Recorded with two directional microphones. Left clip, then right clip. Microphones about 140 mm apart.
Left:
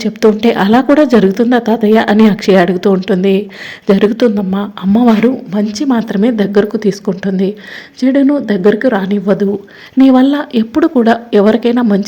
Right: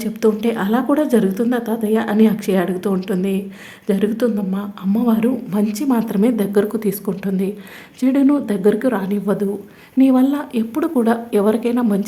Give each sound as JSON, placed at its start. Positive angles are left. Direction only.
{"t": 0.0, "sound": "a woman's voice", "side_deg": 25}
{"t": 5.5, "sound": "a woman's voice", "side_deg": 10}